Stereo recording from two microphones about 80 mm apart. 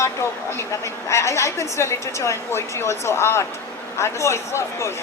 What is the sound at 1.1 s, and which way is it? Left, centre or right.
A man's voice, left.